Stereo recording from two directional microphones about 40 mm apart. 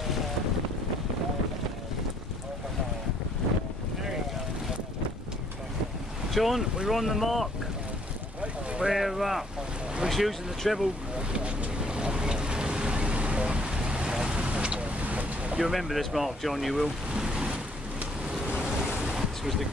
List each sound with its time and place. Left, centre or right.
6.3 s speech: centre
8.8 s speech: centre
11.4 s vehicle: right
15.0 s boat: right
15.6 s speech: centre
17.2 s waves: right
18.9 s waves: centre